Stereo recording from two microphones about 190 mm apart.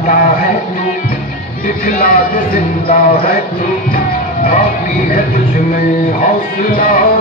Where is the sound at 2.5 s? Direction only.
50° left (ahead or behind).